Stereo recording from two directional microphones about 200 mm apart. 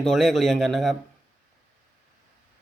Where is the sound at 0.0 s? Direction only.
Centre (ahead or behind).